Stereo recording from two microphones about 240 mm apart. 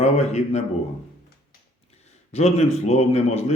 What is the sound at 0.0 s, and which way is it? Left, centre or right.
Speech, left.